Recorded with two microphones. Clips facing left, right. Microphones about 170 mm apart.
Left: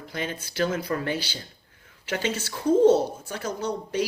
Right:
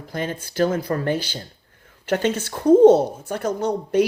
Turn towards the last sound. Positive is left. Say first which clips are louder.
# right 8 dB
turn(degrees=-60)  # may be behind; listen again after turning